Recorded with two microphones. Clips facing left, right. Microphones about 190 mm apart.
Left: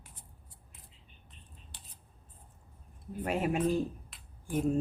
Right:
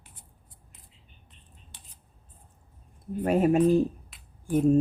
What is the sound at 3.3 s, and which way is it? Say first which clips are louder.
Speech: right 9 dB; 40° right (ahead or behind).